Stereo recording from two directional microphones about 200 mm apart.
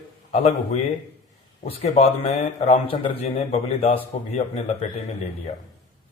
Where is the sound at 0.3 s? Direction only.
35° left (ahead or behind).